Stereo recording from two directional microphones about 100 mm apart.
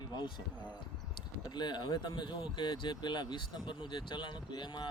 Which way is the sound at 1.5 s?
45° left (ahead or behind).